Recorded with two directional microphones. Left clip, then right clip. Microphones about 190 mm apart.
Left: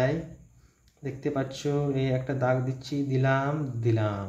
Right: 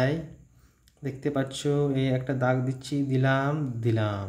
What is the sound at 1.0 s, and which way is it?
Speech, 20° right (ahead or behind).